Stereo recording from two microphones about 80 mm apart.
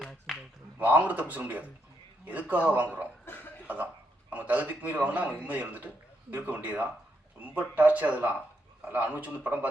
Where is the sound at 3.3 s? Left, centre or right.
Left.